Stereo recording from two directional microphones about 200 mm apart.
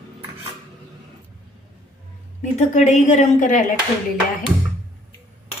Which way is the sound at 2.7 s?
35° left (ahead or behind).